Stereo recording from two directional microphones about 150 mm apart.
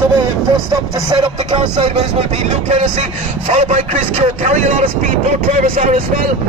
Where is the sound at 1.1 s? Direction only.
40° right (ahead or behind).